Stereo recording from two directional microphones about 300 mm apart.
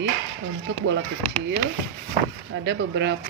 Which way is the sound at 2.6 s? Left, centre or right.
Right.